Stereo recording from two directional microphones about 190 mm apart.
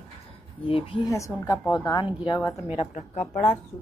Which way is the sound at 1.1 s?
20° left (ahead or behind).